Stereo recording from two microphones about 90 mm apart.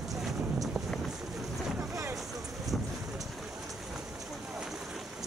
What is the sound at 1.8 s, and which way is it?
Boat, 30° right (ahead or behind).